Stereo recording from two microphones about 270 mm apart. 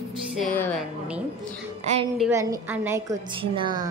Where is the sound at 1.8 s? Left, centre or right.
Right.